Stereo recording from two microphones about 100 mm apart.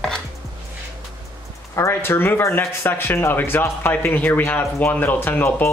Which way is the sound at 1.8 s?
25° left (ahead or behind).